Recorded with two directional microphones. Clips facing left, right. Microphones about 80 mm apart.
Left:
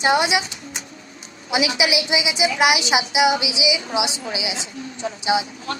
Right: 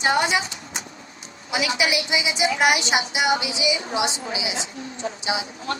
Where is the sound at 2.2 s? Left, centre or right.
Right.